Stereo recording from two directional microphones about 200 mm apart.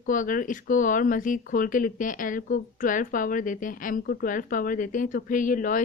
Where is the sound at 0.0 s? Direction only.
40° left (ahead or behind).